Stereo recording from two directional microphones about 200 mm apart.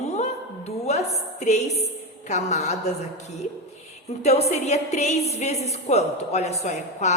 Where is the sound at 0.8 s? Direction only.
35° left (ahead or behind).